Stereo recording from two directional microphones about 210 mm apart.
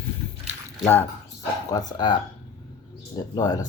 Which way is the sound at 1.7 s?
20° left (ahead or behind).